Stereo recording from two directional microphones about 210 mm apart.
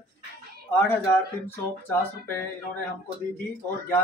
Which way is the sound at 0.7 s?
5° left (ahead or behind).